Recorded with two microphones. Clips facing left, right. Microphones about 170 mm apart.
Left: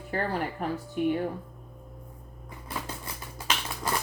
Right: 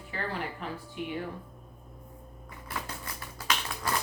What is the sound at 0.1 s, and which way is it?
Speech, 45° left (ahead or behind).